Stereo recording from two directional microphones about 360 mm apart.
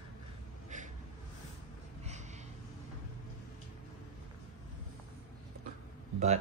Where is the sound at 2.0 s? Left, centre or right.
Centre.